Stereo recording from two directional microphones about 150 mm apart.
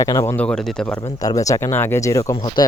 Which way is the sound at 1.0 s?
25° left (ahead or behind).